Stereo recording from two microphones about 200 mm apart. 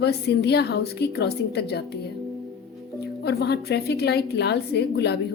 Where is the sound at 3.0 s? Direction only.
55° left (ahead or behind).